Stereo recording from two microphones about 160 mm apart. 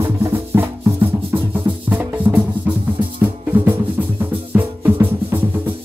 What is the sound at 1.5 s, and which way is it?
Music, 10° right (ahead or behind).